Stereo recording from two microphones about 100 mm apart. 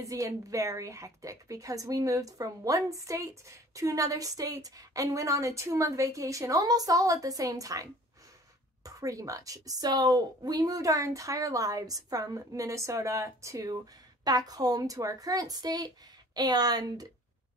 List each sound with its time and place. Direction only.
0.0 s a woman's voice: 35° right (ahead or behind)